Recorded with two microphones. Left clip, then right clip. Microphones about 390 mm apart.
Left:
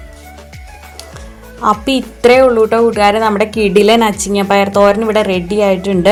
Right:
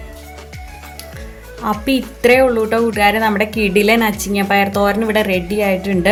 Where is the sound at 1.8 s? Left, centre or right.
Right.